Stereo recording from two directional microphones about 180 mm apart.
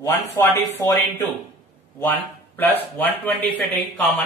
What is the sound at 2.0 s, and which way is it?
Speech, 10° left (ahead or behind).